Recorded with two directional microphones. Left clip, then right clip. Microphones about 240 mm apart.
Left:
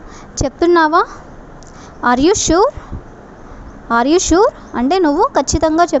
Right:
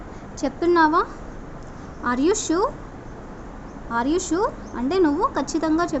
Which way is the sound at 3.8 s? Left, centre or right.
Left.